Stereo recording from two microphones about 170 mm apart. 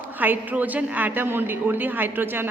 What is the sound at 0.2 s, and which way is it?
A woman's voice, 10° right (ahead or behind).